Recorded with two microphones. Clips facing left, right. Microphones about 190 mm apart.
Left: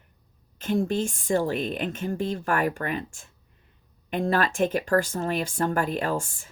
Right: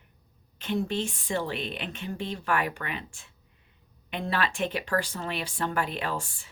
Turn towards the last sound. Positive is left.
turn(degrees=45)  # may be behind; listen again after turning